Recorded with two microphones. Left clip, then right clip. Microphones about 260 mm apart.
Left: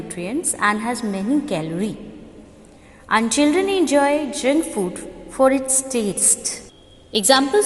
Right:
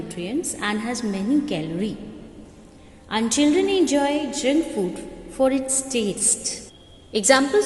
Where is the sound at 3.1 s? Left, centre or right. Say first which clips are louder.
Left 3 dB; centre.